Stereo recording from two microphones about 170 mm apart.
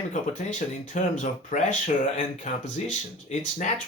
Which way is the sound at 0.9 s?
45° left (ahead or behind).